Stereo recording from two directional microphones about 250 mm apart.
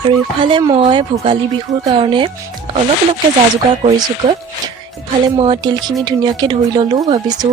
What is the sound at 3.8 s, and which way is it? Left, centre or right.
Speech, right.